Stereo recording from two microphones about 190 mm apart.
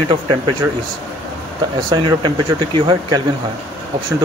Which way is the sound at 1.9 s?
25° right (ahead or behind).